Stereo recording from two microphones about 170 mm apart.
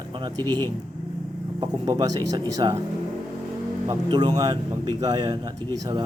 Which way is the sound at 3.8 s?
25° right (ahead or behind).